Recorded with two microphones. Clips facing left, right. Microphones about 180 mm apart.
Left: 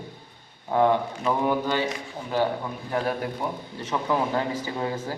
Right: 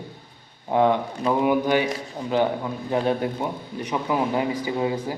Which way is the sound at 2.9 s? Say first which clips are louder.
Right 4 dB; 25° right (ahead or behind).